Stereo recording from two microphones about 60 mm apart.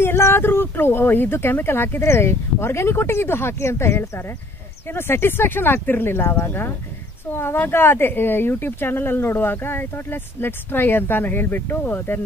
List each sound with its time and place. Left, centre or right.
0.0 s speech: left